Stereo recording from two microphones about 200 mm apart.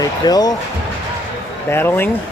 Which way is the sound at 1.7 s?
10° left (ahead or behind).